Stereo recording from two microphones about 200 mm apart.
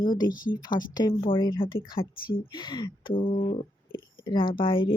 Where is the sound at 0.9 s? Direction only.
20° left (ahead or behind).